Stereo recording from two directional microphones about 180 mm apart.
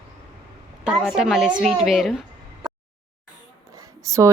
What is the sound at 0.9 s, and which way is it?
Speech, centre (ahead or behind).